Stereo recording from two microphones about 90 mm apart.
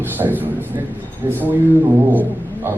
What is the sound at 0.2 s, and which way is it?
Speech, 20° right (ahead or behind).